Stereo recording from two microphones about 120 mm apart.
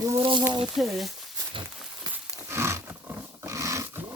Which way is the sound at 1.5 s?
45° right (ahead or behind).